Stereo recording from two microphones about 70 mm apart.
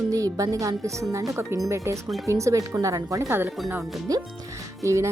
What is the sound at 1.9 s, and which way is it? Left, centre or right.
A woman's voice, right.